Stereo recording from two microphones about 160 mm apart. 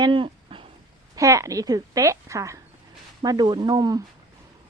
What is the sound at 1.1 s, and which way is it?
Speech, 20° right (ahead or behind).